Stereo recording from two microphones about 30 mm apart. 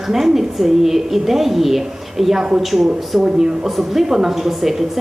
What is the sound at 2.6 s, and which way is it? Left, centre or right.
A woman's voice, centre.